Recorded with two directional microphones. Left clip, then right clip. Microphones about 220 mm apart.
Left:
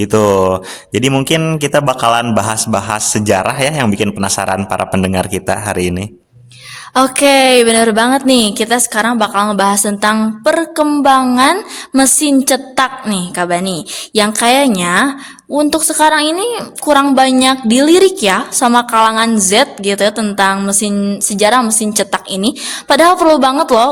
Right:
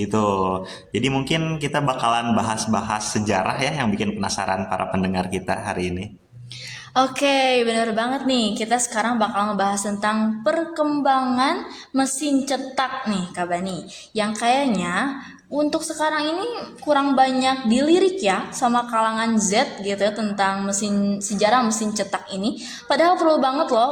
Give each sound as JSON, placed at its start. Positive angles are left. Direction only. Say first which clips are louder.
{"t": 0.0, "sound": "a woman's voice", "louder": "left 11 dB", "side_deg": 55}
{"t": 6.9, "sound": "a woman's voice", "louder": "left 9 dB", "side_deg": 40}